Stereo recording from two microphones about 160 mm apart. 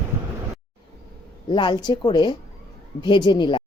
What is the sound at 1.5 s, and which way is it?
A woman's voice, 30° left (ahead or behind).